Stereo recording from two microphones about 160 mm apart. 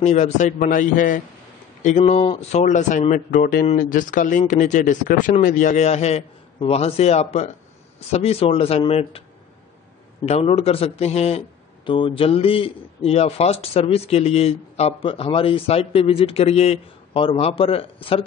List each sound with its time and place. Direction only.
0.0 s a man's voice: 45° left (ahead or behind)
10.2 s a man's voice: 40° left (ahead or behind)